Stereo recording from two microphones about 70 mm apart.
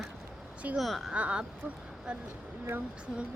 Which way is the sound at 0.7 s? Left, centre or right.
Centre.